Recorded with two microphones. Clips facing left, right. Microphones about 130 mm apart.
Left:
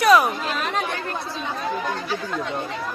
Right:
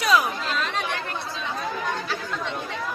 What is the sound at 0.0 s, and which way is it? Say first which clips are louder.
Chatter: left 5 dB; 60° left (ahead or behind).